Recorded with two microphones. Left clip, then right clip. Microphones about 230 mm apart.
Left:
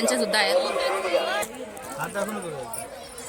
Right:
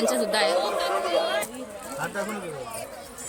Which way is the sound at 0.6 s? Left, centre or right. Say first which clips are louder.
Left 1 dB; right.